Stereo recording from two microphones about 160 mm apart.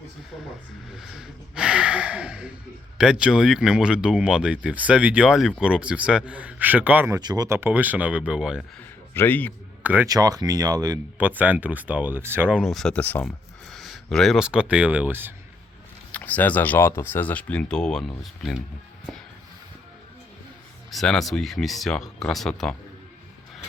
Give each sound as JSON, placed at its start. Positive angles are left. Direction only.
{"t": 0.9, "sound": "speech", "side_deg": 0}
{"t": 7.1, "sound": "speech", "side_deg": -25}
{"t": 8.8, "sound": "a sound", "side_deg": 10}
{"t": 9.8, "sound": "speech", "side_deg": -10}
{"t": 10.1, "sound": "speech", "side_deg": -20}
{"t": 11.2, "sound": "speech", "side_deg": -10}
{"t": 16.1, "sound": "speech", "side_deg": 10}
{"t": 20.9, "sound": "speech", "side_deg": 0}